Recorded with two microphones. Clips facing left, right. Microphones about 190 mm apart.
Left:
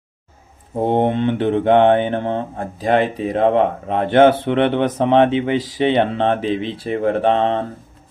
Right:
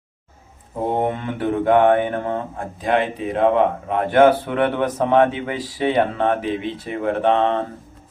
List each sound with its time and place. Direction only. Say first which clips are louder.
0.9 s speech: left 5 dB; 30° left (ahead or behind)